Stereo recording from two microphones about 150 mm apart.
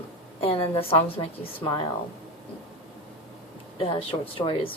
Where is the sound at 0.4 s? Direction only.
40° left (ahead or behind).